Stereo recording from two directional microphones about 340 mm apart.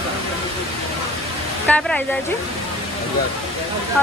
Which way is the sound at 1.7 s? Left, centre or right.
Centre.